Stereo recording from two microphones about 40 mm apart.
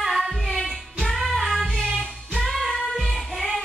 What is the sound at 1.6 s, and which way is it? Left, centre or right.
Music, centre.